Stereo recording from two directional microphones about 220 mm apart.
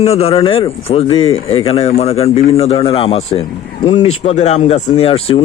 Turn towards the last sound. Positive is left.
turn(degrees=25)  # may be behind; listen again after turning